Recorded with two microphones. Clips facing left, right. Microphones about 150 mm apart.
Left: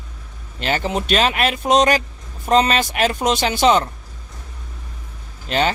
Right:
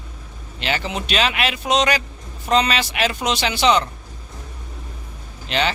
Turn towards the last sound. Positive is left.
turn(degrees=45)  # may be behind; listen again after turning